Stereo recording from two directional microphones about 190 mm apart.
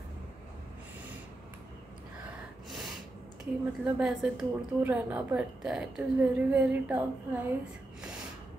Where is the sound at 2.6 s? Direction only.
Centre (ahead or behind).